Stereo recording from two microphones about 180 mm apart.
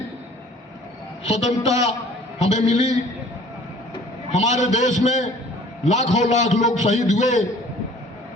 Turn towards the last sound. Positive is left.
turn(degrees=40)  # may be behind; listen again after turning